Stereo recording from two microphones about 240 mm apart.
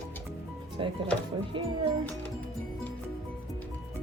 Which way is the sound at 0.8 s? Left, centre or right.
Centre.